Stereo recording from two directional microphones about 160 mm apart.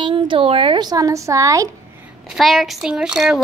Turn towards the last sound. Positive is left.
turn(degrees=0)  # may be behind; listen again after turning